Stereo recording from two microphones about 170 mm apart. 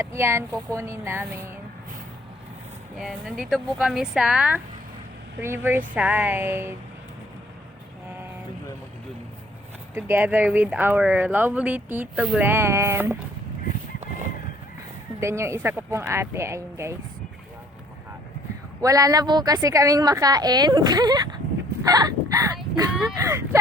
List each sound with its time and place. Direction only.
0.0 s speech: 15° right (ahead or behind)
3.0 s speech: centre (ahead or behind)
9.9 s speech: 10° right (ahead or behind)
15.2 s speech: 15° right (ahead or behind)
18.8 s a woman's voice: 20° right (ahead or behind)
21.8 s a sound: 20° right (ahead or behind)
23.1 s speech: 15° right (ahead or behind)